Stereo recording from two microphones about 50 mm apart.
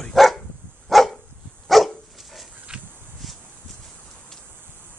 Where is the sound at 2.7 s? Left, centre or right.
Centre.